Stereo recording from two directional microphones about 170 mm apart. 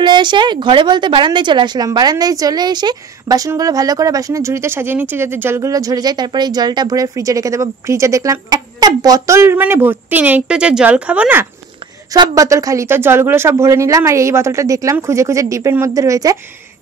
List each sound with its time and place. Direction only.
0.0 s speech: 25° right (ahead or behind); by 11.4 s 10° right (ahead or behind)
12.1 s speech: 20° right (ahead or behind)